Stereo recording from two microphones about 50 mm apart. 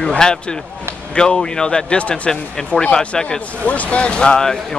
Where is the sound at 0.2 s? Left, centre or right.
Centre.